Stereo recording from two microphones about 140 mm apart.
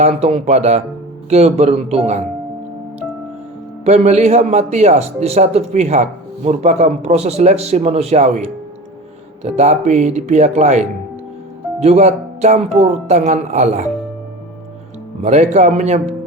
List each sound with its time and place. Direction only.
0.0 s a man's voice: 50° right (ahead or behind)
3.8 s a man's voice: 55° right (ahead or behind)
15.2 s a man's voice: 55° right (ahead or behind)